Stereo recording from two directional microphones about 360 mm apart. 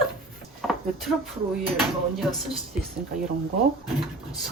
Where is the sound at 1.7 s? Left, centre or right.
Centre.